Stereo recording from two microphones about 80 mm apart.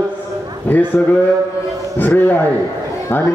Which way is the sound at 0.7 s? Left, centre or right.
Left.